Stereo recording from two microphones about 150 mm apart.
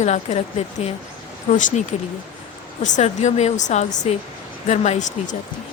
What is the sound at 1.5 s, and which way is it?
Speech, 60° left (ahead or behind).